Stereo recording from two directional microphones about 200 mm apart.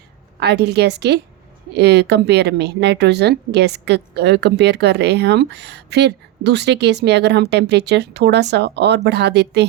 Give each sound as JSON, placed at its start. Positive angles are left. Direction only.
{"t": 0.3, "sound": "a woman's voice", "side_deg": -55}